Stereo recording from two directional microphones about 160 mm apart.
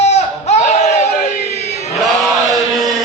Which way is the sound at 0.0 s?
45° left (ahead or behind).